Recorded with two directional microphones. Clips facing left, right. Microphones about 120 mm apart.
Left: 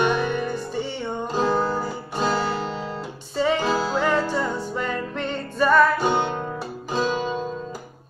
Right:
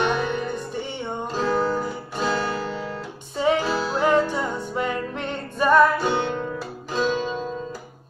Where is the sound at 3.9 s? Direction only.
15° right (ahead or behind).